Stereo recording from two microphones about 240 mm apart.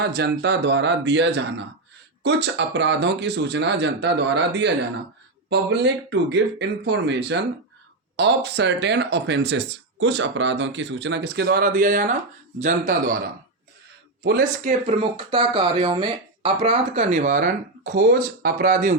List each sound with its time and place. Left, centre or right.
0.0 s speech: right
14.3 s speech: right